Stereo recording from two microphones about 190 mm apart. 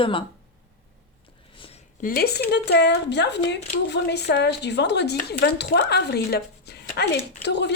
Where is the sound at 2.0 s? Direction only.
50° left (ahead or behind).